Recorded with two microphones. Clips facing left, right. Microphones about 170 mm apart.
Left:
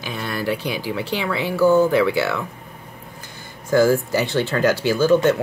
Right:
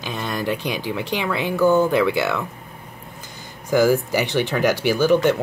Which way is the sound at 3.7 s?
15° right (ahead or behind).